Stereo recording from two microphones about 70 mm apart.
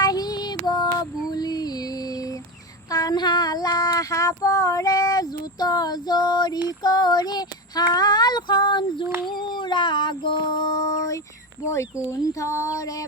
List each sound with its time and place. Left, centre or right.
0.0 s child singing: left
1.3 s a sound: left
2.9 s female singing: left
6.8 s child singing: left
9.2 s a sound: left
11.6 s speech: left